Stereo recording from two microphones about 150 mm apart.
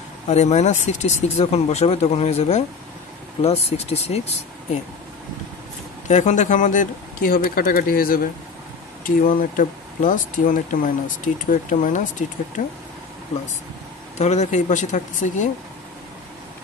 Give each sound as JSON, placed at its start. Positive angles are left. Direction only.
{"t": 0.3, "sound": "speech", "side_deg": 50}
{"t": 6.0, "sound": "speech", "side_deg": 50}
{"t": 14.1, "sound": "speech", "side_deg": 50}